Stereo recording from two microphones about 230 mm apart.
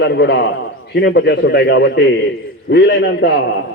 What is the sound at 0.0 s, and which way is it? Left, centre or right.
A man's voice, left.